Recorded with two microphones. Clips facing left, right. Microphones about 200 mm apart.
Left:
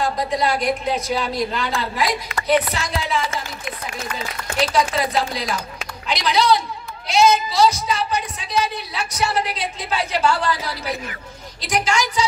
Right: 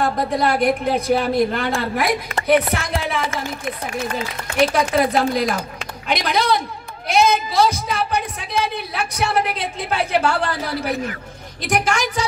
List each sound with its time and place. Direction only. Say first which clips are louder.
0.0 s speech: right 2 dB; 55° right (ahead or behind)